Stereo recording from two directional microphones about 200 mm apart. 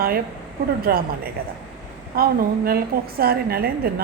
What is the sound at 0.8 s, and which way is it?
Speech, 50° right (ahead or behind).